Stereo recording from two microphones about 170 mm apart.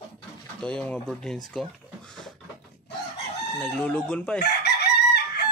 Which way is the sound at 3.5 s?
5° left (ahead or behind).